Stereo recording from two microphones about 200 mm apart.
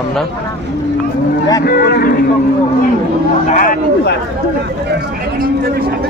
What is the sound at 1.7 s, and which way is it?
Speech, 50° left (ahead or behind).